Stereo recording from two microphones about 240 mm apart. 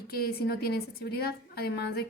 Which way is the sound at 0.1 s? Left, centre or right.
Left.